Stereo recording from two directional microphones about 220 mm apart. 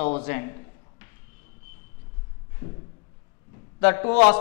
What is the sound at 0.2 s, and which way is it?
Speech, 15° left (ahead or behind).